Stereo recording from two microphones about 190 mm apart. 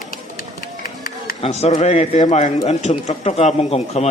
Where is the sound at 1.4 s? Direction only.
35° left (ahead or behind).